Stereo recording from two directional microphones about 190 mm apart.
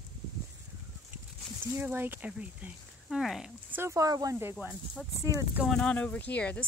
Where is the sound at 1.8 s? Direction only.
10° right (ahead or behind).